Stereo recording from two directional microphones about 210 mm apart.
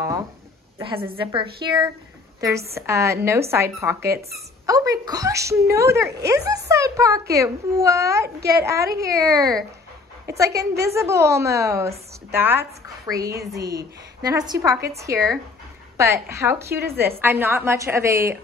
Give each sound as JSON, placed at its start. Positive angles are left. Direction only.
{"t": 0.7, "sound": "a woman's voice", "side_deg": -25}
{"t": 8.4, "sound": "a woman's voice", "side_deg": -50}
{"t": 8.6, "sound": "a woman's voice", "side_deg": -15}